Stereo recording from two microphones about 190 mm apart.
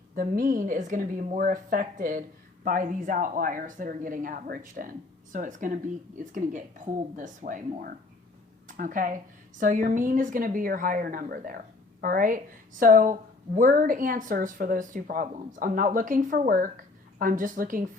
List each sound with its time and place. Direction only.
0.2 s a woman's voice: 45° right (ahead or behind)